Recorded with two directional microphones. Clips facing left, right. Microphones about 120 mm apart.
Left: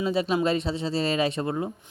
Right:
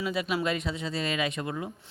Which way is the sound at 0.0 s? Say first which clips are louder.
Left 5 dB; 30° left (ahead or behind).